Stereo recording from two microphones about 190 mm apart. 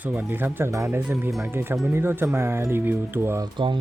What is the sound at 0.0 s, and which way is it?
Speech, 10° right (ahead or behind).